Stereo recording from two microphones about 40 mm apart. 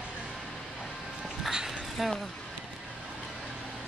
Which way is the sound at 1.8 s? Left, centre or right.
Centre.